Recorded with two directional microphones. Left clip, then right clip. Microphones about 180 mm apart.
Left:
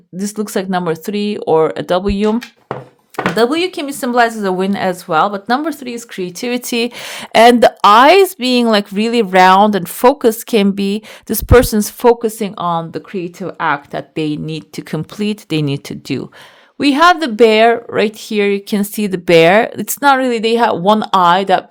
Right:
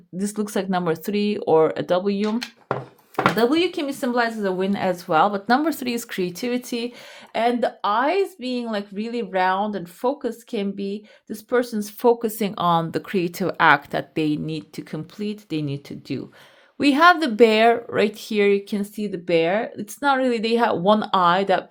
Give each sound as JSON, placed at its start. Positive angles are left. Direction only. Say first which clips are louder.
{"t": 0.2, "sound": "a woman's voice", "louder": "left 6 dB", "side_deg": 20}
{"t": 3.3, "sound": "a woman's voice", "louder": "left 6 dB", "side_deg": 25}
{"t": 5.8, "sound": "speech", "louder": "left 2 dB", "side_deg": 0}
{"t": 6.2, "sound": "a woman's voice", "louder": "left 5 dB", "side_deg": 20}
{"t": 6.5, "sound": "a woman's voice", "louder": "left 9 dB", "side_deg": 40}
{"t": 12.0, "sound": "speech", "louder": "left 7 dB", "side_deg": 20}
{"t": 14.2, "sound": "a woman's voice", "louder": "left 6 dB", "side_deg": 20}
{"t": 14.8, "sound": "speech", "louder": "left 13 dB", "side_deg": 40}
{"t": 16.7, "sound": "a woman's voice", "louder": "left 5 dB", "side_deg": 25}
{"t": 18.7, "sound": "speech", "louder": "left 10 dB", "side_deg": 50}